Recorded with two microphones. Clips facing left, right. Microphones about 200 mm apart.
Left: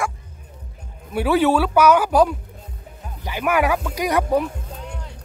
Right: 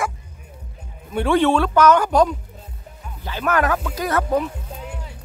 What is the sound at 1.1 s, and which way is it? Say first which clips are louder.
Speech: even; 5° left (ahead or behind).